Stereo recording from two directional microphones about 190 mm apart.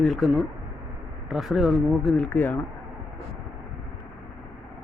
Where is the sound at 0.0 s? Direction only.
Centre (ahead or behind).